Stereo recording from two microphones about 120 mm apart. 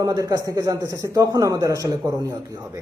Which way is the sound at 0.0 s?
30° right (ahead or behind).